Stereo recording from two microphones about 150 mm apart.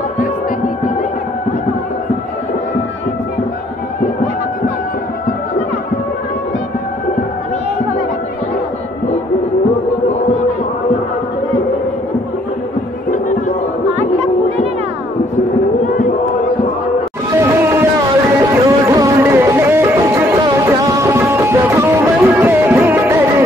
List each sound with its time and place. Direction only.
13.1 s music: 60° left (ahead or behind)
17.5 s a sound: 15° right (ahead or behind)
18.4 s music: 20° right (ahead or behind)